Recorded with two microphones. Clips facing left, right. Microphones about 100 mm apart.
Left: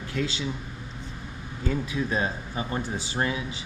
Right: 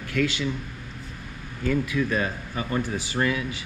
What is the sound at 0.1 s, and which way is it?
Speech, 60° right (ahead or behind).